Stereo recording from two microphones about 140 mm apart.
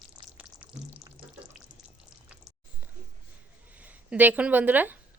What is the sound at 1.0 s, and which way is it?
Water, centre (ahead or behind).